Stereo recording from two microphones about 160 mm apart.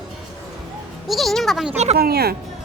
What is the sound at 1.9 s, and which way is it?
Speech, 75° right (ahead or behind).